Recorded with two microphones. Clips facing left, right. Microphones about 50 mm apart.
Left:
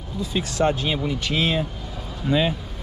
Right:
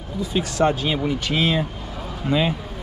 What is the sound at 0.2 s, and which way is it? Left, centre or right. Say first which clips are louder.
Speech: right 2 dB; right.